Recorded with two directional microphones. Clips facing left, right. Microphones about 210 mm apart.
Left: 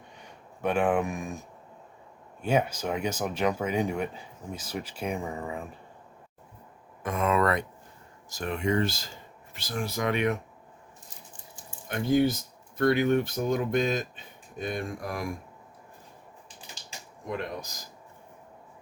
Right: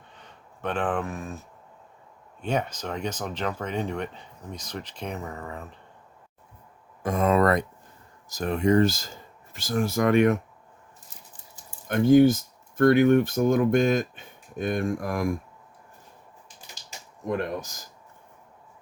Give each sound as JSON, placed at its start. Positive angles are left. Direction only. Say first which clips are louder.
{"t": 0.2, "sound": "speech", "louder": "left 3 dB", "side_deg": 10}
{"t": 7.0, "sound": "speech", "louder": "right 4 dB", "side_deg": -35}
{"t": 11.9, "sound": "speech", "louder": "right 7 dB", "side_deg": -50}